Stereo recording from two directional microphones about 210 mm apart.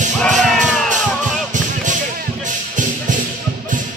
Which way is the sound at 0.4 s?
Centre (ahead or behind).